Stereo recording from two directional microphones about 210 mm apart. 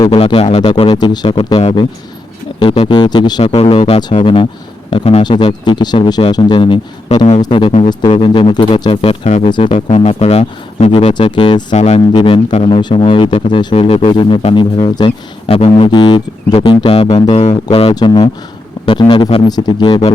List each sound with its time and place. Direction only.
0.0 s speech: 25° left (ahead or behind)
7.2 s speech: 35° left (ahead or behind)
7.4 s speech: 25° left (ahead or behind)
11.7 s speech: 35° left (ahead or behind)